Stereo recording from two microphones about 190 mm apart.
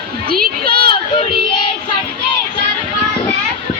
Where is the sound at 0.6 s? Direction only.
25° left (ahead or behind).